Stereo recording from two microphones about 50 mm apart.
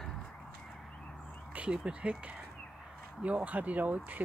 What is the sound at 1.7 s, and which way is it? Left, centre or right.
Speech, right.